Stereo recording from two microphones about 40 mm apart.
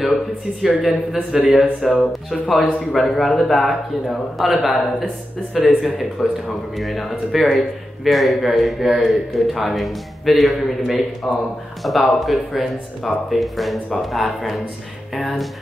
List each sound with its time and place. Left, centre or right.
0.0 s speech: centre
0.8 s speech: centre
2.0 s speech: left
2.6 s speech: centre